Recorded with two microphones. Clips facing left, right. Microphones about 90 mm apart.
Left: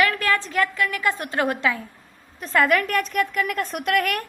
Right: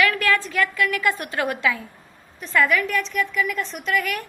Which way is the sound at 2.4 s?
45° left (ahead or behind).